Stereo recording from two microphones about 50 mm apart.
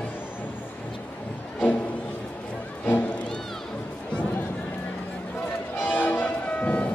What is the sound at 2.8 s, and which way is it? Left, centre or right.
Music, left.